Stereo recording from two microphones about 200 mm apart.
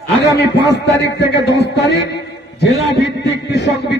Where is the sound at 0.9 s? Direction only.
55° left (ahead or behind).